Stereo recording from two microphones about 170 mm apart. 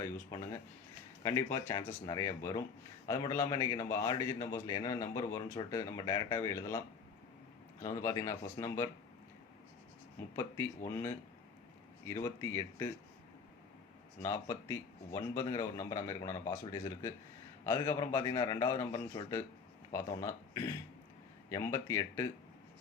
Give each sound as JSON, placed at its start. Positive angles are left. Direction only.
{"t": 0.0, "sound": "a sound", "side_deg": 15}
{"t": 1.2, "sound": "a man's voice", "side_deg": 15}
{"t": 12.0, "sound": "speech", "side_deg": 15}
{"t": 14.2, "sound": "a man's voice", "side_deg": 15}